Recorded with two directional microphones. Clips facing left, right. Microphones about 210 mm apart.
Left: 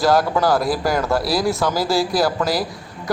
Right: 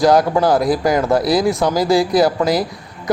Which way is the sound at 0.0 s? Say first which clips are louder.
Right 4 dB; 15° right (ahead or behind).